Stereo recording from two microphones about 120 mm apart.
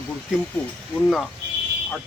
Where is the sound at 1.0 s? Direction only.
5° left (ahead or behind).